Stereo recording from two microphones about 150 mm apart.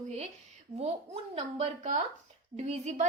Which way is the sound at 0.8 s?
45° right (ahead or behind).